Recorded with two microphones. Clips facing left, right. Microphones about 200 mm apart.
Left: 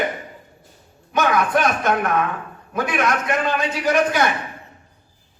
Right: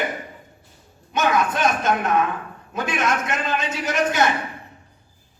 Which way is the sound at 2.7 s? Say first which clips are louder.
Left 2 dB; 25° right (ahead or behind).